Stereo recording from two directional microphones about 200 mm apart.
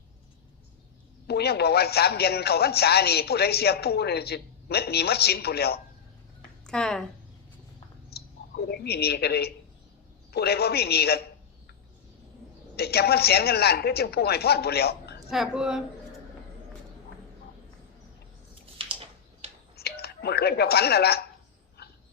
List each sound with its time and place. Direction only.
1.3 s speech: 55° left (ahead or behind)
6.7 s a woman's voice: 5° left (ahead or behind)
8.1 s a sound: 50° left (ahead or behind)
10.3 s speech: 55° left (ahead or behind)
12.7 s speech: 55° left (ahead or behind)
15.3 s a woman's voice: centre (ahead or behind)
18.6 s a sound: 25° right (ahead or behind)
19.7 s telephone: 55° left (ahead or behind)
21.8 s a sound: 55° left (ahead or behind)